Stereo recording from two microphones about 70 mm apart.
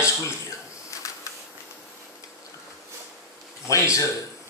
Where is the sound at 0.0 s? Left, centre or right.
Left.